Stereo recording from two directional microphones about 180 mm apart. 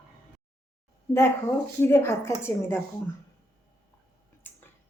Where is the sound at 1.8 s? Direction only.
15° left (ahead or behind).